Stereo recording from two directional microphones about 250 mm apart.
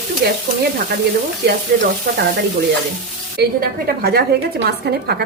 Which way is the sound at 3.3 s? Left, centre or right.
Right.